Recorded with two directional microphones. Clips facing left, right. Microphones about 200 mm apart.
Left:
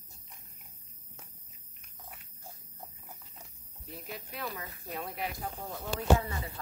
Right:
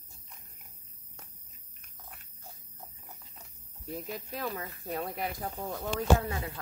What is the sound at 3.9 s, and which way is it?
Speech, 40° right (ahead or behind).